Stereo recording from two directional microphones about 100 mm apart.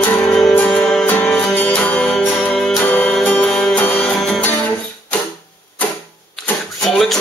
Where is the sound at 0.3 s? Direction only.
5° left (ahead or behind).